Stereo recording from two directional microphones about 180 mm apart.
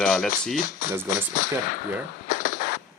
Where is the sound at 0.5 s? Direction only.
45° left (ahead or behind).